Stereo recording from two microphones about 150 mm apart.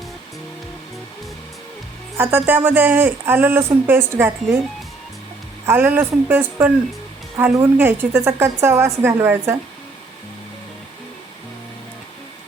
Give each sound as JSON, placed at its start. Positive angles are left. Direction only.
{"t": 2.1, "sound": "speech", "side_deg": -15}
{"t": 5.6, "sound": "speech", "side_deg": -10}